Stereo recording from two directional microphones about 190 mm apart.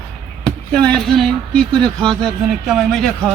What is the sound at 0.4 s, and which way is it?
Speech, 5° left (ahead or behind).